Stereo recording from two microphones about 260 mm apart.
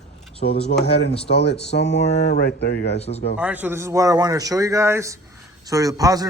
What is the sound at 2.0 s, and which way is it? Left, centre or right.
Speech, left.